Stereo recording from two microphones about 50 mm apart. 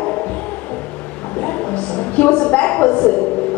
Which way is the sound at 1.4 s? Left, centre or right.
Left.